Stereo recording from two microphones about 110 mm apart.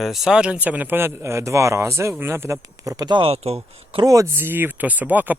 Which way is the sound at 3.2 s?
65° right (ahead or behind).